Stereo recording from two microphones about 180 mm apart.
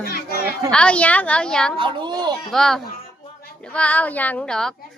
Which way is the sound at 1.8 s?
25° right (ahead or behind).